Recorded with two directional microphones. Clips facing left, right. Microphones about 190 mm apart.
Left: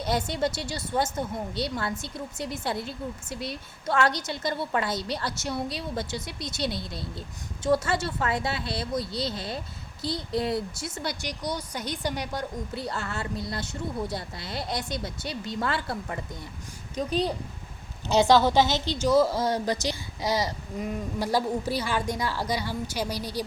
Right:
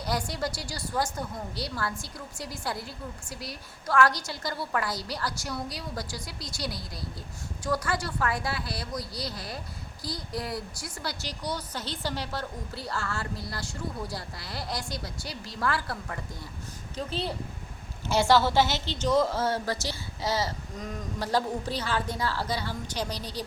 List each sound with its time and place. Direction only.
0.0 s a woman's voice: 25° left (ahead or behind)